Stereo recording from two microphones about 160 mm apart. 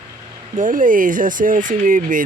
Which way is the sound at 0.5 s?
55° right (ahead or behind).